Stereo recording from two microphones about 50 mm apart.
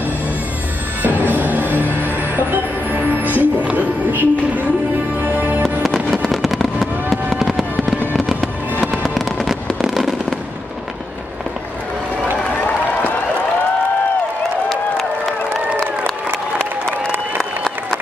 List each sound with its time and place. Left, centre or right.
1.0 s music: right
5.6 s music: centre
6.2 s fireworks: centre
8.8 s fireworks: centre
14.7 s a sound: centre